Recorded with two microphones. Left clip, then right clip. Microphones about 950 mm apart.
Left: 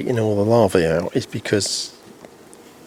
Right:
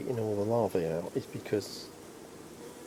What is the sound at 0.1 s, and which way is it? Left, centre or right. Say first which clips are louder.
Speech: left 13 dB; left.